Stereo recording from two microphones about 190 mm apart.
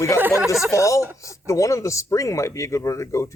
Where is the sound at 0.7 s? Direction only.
15° left (ahead or behind).